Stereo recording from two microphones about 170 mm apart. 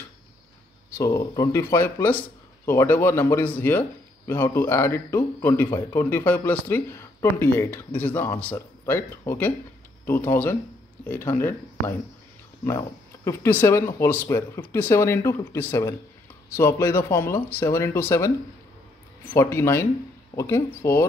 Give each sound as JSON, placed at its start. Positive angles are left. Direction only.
{"t": 0.9, "sound": "speech", "side_deg": 15}
{"t": 12.6, "sound": "speech", "side_deg": 15}
{"t": 19.3, "sound": "speech", "side_deg": 15}